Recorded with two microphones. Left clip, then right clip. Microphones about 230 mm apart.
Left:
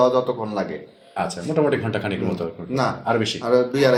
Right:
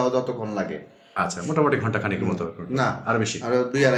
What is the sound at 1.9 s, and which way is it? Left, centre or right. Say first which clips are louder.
Speech: left 1 dB; right.